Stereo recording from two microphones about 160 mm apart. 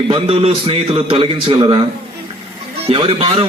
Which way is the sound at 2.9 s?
35° right (ahead or behind).